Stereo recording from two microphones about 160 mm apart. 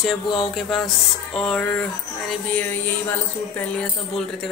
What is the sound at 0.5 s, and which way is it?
A woman's voice, centre (ahead or behind).